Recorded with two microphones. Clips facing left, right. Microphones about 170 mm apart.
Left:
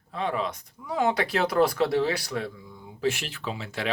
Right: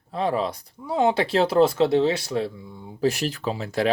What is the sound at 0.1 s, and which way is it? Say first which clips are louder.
Speech: right 5 dB; 35° right (ahead or behind).